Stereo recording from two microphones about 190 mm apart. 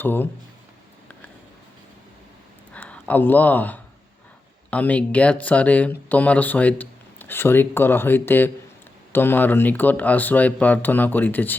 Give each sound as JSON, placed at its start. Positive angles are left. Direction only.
{"t": 0.0, "sound": "speech", "side_deg": 10}
{"t": 2.7, "sound": "speech", "side_deg": 10}